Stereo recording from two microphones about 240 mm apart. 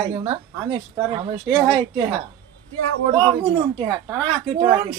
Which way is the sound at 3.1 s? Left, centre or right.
Centre.